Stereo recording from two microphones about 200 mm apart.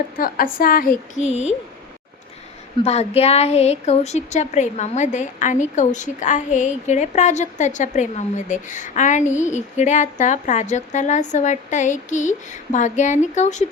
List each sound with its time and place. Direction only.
0.2 s a woman's voice: 45° left (ahead or behind)
2.8 s a woman's voice: 30° left (ahead or behind)